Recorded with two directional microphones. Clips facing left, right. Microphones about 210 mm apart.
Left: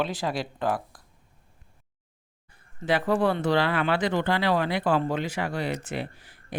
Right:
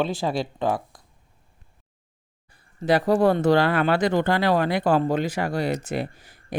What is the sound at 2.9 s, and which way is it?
Speech, 40° right (ahead or behind).